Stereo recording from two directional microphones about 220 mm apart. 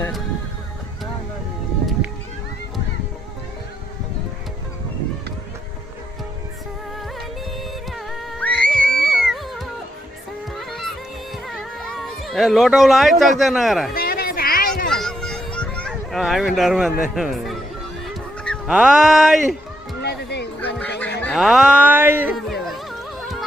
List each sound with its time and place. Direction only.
7.9 s music: centre (ahead or behind)
13.4 s speech: centre (ahead or behind)
13.9 s a sound: 45° left (ahead or behind)
14.8 s a sound: centre (ahead or behind)
17.0 s speech: centre (ahead or behind)
18.0 s a sound: centre (ahead or behind)
20.0 s music: 50° left (ahead or behind)
20.7 s fowl: 5° left (ahead or behind)
21.2 s speech: 5° left (ahead or behind)
22.6 s music: centre (ahead or behind)